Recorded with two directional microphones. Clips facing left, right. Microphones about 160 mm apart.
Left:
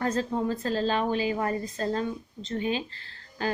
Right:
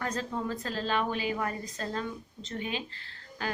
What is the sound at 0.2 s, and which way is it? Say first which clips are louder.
A woman's voice: left 6 dB; 35° left (ahead or behind).